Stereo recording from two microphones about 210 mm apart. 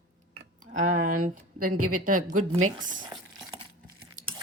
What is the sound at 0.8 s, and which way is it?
Speech, 40° right (ahead or behind).